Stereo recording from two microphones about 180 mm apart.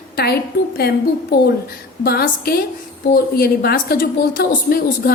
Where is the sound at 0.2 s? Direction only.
60° left (ahead or behind).